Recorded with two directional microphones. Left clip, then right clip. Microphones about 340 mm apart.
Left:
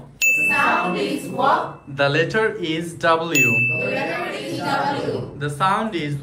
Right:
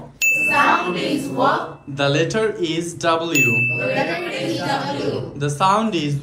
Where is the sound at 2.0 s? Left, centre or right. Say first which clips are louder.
Even; centre.